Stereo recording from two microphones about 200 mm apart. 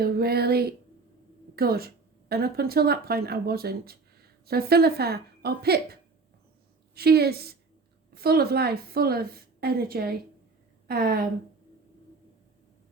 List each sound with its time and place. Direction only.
0.0 s a woman's voice: 50° right (ahead or behind)